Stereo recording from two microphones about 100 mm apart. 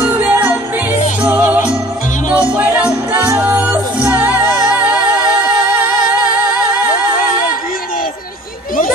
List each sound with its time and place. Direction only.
0.0 s music: 20° right (ahead or behind)